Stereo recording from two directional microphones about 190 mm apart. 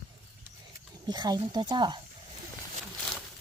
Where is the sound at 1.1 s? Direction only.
20° right (ahead or behind).